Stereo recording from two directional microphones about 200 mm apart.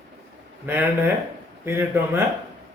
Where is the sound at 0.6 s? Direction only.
10° right (ahead or behind).